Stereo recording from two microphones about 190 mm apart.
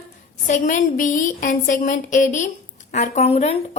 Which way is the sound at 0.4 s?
40° left (ahead or behind).